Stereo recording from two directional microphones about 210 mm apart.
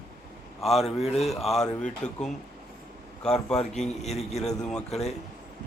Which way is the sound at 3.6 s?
30° left (ahead or behind).